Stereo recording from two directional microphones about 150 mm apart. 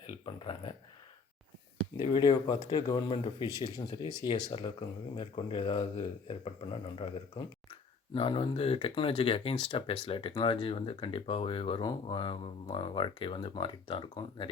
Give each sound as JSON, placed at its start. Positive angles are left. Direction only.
{"t": 2.0, "sound": "speech", "side_deg": 30}